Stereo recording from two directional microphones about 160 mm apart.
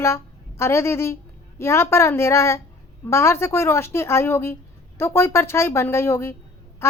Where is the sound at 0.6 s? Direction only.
15° left (ahead or behind).